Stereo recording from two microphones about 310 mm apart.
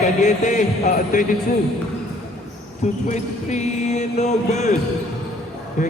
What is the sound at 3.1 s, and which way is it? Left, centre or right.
Speech, left.